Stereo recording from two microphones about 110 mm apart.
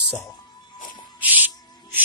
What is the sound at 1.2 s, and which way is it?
Insect, 15° right (ahead or behind).